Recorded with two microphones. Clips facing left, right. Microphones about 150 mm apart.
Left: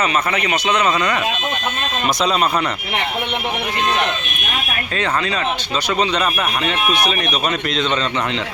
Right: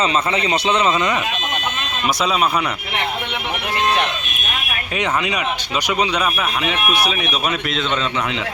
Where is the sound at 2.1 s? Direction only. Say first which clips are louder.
Even; 5° right (ahead or behind).